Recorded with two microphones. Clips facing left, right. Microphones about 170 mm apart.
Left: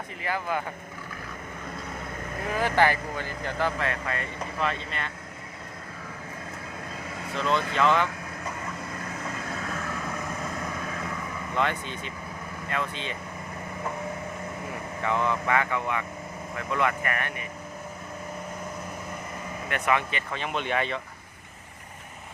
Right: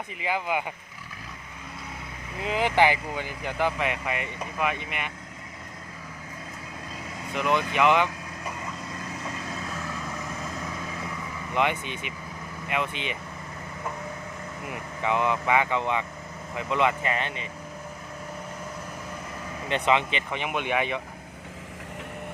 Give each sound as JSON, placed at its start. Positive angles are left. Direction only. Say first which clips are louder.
{"t": 0.2, "sound": "speech", "louder": "right 2 dB", "side_deg": -15}
{"t": 2.4, "sound": "speech", "louder": "right 1 dB", "side_deg": -20}
{"t": 7.3, "sound": "speech", "louder": "right 1 dB", "side_deg": -15}
{"t": 9.3, "sound": "vehicle", "louder": "left 1 dB", "side_deg": -20}
{"t": 11.5, "sound": "speech", "louder": "right 2 dB", "side_deg": -20}
{"t": 14.7, "sound": "speech", "louder": "right 2 dB", "side_deg": -15}
{"t": 19.6, "sound": "speech", "louder": "right 3 dB", "side_deg": -20}